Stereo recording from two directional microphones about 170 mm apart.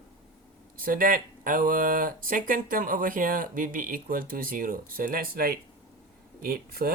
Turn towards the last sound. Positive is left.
turn(degrees=-60)  # may be behind; listen again after turning